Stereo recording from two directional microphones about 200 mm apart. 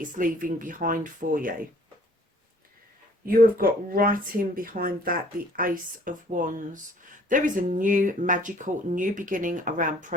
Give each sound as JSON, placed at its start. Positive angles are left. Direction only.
{"t": 0.0, "sound": "speech", "side_deg": -40}
{"t": 3.2, "sound": "speech", "side_deg": -45}